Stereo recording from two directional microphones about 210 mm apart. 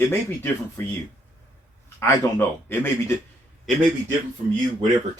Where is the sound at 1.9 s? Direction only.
10° left (ahead or behind).